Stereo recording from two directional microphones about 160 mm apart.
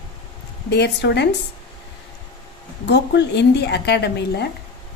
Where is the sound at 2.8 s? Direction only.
90° left.